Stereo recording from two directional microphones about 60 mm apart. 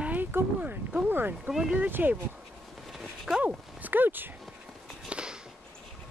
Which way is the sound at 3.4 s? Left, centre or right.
Right.